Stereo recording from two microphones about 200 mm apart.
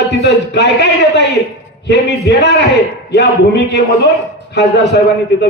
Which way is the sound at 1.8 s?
60° left (ahead or behind).